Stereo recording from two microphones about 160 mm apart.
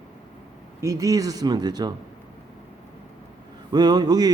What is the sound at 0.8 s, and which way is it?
A man's voice, 20° right (ahead or behind).